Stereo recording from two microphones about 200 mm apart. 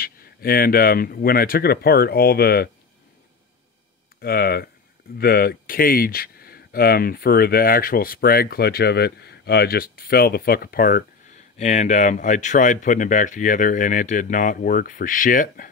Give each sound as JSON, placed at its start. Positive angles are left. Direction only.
{"t": 0.0, "sound": "speech", "side_deg": 50}
{"t": 4.2, "sound": "speech", "side_deg": 50}
{"t": 11.5, "sound": "speech", "side_deg": 35}